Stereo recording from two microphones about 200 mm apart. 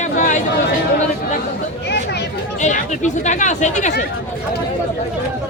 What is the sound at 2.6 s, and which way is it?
Speech, 35° left (ahead or behind).